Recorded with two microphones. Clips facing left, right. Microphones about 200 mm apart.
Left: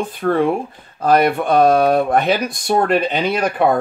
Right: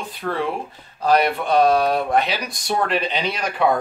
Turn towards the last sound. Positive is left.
turn(degrees=55)  # may be behind; listen again after turning